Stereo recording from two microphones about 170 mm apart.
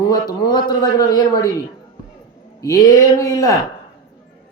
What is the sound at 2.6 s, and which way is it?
Speech, 20° left (ahead or behind).